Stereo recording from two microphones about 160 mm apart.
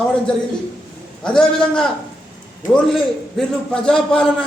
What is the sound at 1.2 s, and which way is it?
A man's voice, 5° left (ahead or behind).